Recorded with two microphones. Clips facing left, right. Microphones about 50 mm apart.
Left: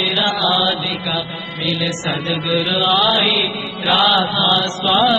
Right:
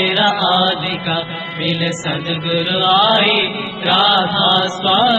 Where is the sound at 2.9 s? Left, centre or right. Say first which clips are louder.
Right 5 dB; right.